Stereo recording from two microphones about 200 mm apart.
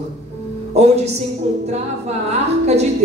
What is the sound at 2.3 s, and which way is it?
Speech, 35° right (ahead or behind).